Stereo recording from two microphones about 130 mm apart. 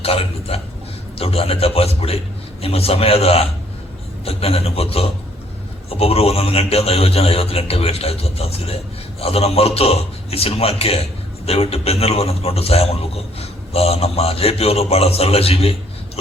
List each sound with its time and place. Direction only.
0.0 s a man's voice: 50° left (ahead or behind)